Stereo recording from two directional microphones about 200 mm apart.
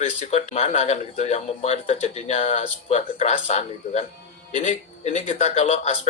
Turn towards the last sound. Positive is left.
turn(degrees=30)  # may be behind; listen again after turning